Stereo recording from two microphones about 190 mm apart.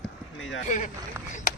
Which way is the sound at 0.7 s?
40° left (ahead or behind).